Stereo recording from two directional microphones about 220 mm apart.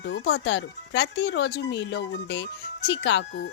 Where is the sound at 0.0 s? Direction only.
50° left (ahead or behind).